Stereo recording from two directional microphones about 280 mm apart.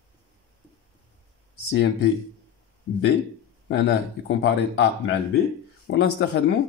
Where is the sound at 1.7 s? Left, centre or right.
Left.